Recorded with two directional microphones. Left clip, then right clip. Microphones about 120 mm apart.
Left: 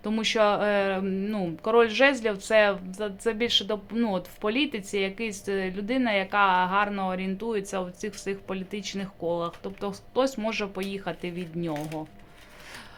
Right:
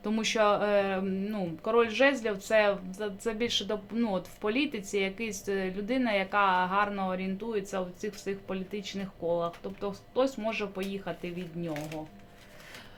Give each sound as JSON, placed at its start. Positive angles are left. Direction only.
{"t": 0.0, "sound": "a woman's voice", "side_deg": 20}